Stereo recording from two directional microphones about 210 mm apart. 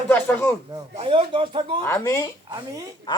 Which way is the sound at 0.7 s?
25° right (ahead or behind).